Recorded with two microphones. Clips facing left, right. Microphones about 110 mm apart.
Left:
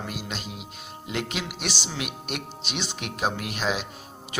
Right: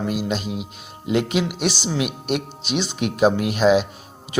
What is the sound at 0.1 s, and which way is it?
A man's voice, 10° right (ahead or behind).